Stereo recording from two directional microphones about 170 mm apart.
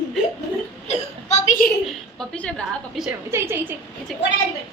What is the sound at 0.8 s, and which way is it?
Speech, 40° left (ahead or behind).